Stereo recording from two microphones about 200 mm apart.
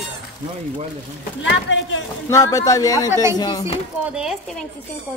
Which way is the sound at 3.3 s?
20° left (ahead or behind).